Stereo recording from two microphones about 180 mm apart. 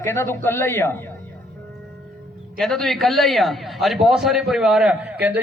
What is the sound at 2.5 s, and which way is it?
A man's voice, centre (ahead or behind).